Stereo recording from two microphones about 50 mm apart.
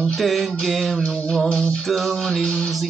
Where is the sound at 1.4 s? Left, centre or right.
Left.